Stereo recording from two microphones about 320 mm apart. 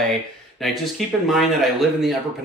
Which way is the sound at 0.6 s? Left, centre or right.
Centre.